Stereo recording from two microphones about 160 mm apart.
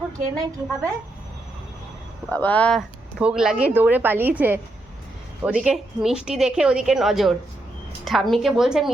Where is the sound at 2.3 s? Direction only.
10° left (ahead or behind).